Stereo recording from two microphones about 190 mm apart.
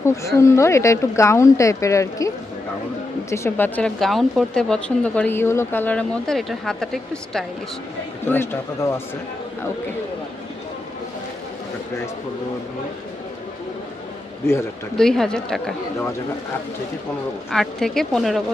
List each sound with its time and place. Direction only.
0.0 s speech: 15° left (ahead or behind)
14.9 s speech: centre (ahead or behind)
17.5 s speech: centre (ahead or behind)